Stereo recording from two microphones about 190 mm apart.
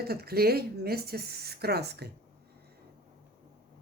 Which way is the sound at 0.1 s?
55° right (ahead or behind).